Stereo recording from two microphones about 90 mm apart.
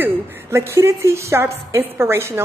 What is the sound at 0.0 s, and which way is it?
A woman's voice, 25° right (ahead or behind).